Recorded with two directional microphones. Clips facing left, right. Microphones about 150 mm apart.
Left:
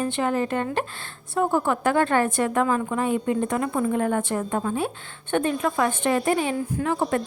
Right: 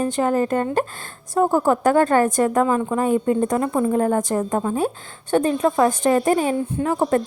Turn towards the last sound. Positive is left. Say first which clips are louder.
# right 4 dB
turn(degrees=-40)  # may be behind; listen again after turning